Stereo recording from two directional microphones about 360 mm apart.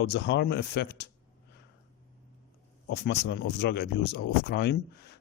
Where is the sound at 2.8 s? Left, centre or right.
Left.